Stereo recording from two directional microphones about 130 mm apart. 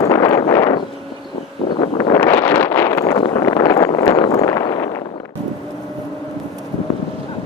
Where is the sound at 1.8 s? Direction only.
35° left (ahead or behind).